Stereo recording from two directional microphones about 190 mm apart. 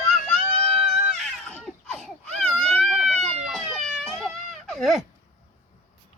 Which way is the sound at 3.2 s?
35° right (ahead or behind).